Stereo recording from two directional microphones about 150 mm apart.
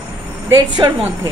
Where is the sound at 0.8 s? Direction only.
35° right (ahead or behind).